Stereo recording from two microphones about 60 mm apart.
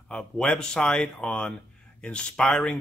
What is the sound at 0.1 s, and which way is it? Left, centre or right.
Speech, centre.